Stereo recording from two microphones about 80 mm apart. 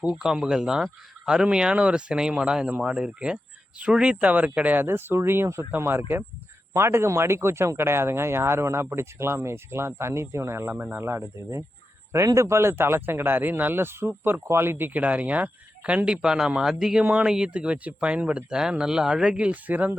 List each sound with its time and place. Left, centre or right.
0.0 s speech: centre
17.0 s speech: centre